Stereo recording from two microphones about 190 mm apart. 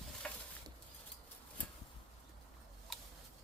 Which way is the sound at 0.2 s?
5° left (ahead or behind).